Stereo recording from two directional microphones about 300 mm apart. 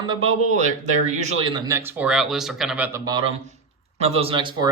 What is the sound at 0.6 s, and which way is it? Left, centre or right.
Speech, right.